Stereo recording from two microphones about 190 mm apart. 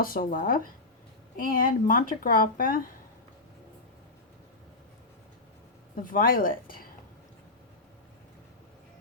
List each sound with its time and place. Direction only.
0.0 s a woman's voice: 50° left (ahead or behind)
6.0 s a woman's voice: 45° left (ahead or behind)